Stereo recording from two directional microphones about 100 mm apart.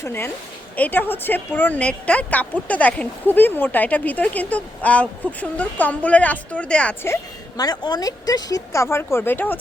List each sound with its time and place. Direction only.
0.0 s a woman's voice: 25° left (ahead or behind)
7.5 s speech: 40° left (ahead or behind); by 9.6 s 20° left (ahead or behind)